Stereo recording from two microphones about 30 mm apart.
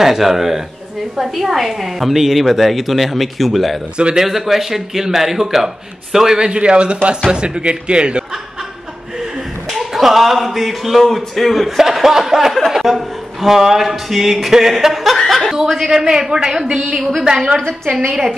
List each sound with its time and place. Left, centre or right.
0.0 s a woman's voice: centre
3.9 s speech: right
4.2 s a man's voice: centre
6.6 s speech: right
9.7 s speech: centre
15.1 s chuckle: centre
15.6 s a man's voice: centre
15.9 s a man's voice: centre